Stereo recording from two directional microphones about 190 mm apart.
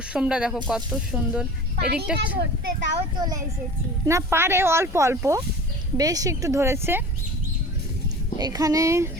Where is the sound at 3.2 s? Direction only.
20° right (ahead or behind).